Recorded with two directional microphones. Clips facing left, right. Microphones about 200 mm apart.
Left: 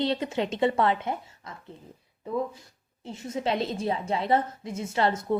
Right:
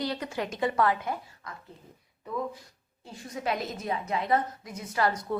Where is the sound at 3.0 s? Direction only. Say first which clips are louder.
Left 3 dB; 25° left (ahead or behind).